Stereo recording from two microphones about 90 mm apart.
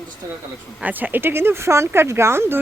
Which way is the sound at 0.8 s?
15° right (ahead or behind).